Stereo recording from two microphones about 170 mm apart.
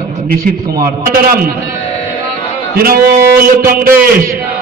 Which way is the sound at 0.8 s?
60° right (ahead or behind).